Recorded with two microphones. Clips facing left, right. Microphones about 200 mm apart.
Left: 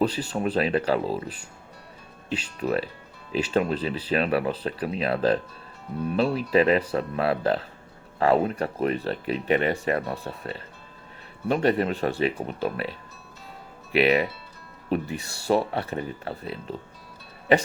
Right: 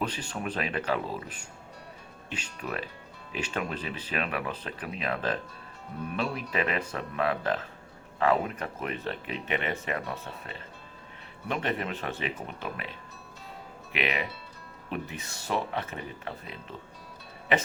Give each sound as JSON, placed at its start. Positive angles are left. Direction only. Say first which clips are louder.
{"t": 0.0, "sound": "speech", "louder": "left 8 dB", "side_deg": 35}
{"t": 13.9, "sound": "speech", "louder": "left 11 dB", "side_deg": 35}